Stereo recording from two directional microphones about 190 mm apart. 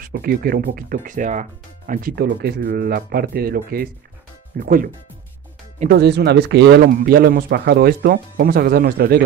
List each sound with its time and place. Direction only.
0.0 s speech: 50° right (ahead or behind)
5.9 s speech: 60° right (ahead or behind)